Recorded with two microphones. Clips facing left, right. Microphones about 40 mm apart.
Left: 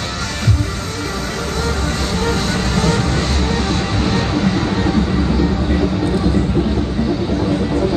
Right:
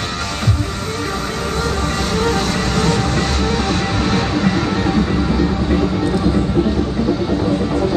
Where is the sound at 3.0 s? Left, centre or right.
Right.